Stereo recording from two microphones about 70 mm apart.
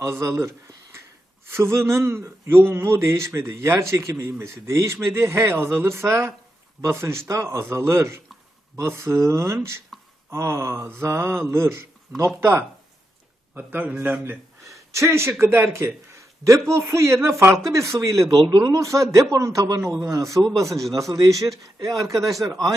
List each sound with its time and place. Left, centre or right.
0.0 s a man's voice: right
9.9 s a sound: centre
10.2 s speech: right
13.5 s speech: right
14.7 s speech: right
16.4 s a man's voice: right
20.7 s a man's voice: centre
21.1 s a man's voice: right